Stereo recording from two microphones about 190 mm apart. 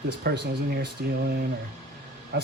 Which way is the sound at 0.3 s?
60° right (ahead or behind).